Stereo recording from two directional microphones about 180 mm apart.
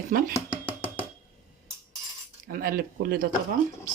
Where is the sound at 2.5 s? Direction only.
55° right (ahead or behind).